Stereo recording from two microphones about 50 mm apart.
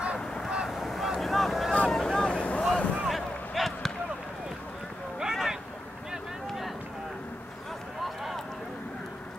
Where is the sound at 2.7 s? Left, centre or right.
Left.